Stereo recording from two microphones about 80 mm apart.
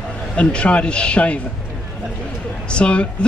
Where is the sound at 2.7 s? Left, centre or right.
Centre.